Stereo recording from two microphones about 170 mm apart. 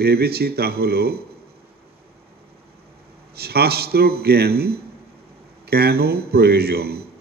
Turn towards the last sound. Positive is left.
turn(degrees=-65)  # may be behind; listen again after turning